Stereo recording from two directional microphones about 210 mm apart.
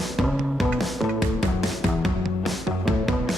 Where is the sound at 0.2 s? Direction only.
Centre (ahead or behind).